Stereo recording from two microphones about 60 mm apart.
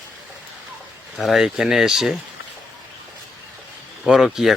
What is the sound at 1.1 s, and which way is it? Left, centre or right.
Speech, centre.